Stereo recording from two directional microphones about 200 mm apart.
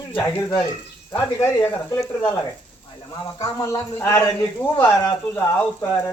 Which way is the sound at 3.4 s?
15° left (ahead or behind).